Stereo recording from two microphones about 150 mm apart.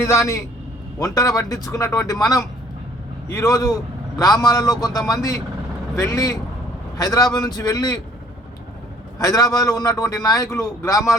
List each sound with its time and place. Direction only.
0.0 s a man's voice: 20° left (ahead or behind)
9.1 s a man's voice: 20° left (ahead or behind)